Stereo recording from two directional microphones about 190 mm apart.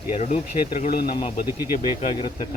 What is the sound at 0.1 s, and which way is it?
Speech, 35° left (ahead or behind).